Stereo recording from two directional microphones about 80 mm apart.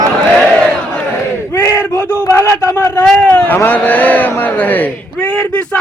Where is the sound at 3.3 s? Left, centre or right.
Left.